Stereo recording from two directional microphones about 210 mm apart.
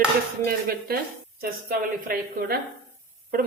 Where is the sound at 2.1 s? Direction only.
45° right (ahead or behind).